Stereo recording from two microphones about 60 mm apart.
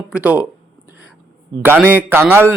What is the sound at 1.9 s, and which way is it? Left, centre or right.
Speech, right.